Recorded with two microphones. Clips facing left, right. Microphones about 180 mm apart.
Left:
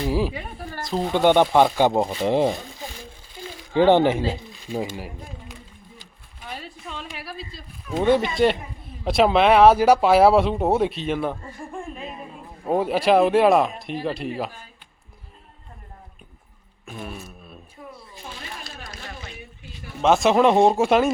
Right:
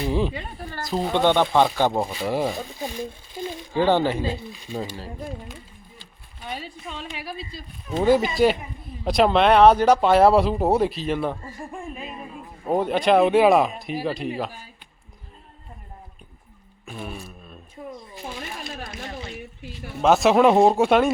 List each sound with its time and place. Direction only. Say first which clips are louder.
0.1 s a sound: even; 5° left (ahead or behind)
0.8 s speech: even; centre (ahead or behind)
1.2 s speech: left 3 dB; 15° left (ahead or behind)
3.8 s speech: left 4 dB; 20° left (ahead or behind)
6.4 s a sound: right 2 dB; centre (ahead or behind)
8.0 s speech: right 1 dB; centre (ahead or behind)
12.6 s speech: even; 5° left (ahead or behind)
16.8 s music: even; centre (ahead or behind)
17.4 s a sound: right 3 dB; 5° left (ahead or behind)
20.0 s speech: right 1 dB; centre (ahead or behind)